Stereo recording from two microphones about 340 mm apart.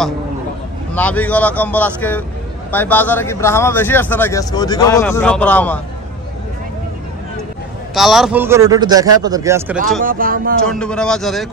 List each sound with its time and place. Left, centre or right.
0.9 s speech: centre
7.9 s a man's voice: centre
10.0 s speech: right
10.7 s speech: centre